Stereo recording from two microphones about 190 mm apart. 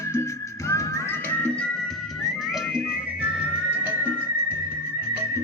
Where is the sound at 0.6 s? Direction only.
15° left (ahead or behind).